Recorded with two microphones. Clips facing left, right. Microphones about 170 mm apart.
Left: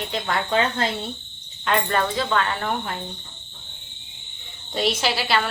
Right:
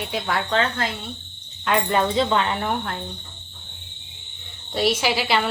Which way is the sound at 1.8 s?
20° right (ahead or behind).